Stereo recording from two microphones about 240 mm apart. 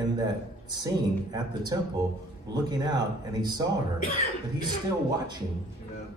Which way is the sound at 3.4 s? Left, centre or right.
Centre.